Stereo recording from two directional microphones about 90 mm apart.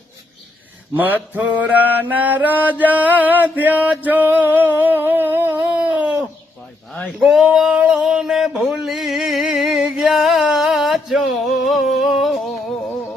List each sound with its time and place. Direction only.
0.9 s mantra: 20° right (ahead or behind)
7.2 s male singing: 5° right (ahead or behind)
7.4 s a sound: 10° right (ahead or behind)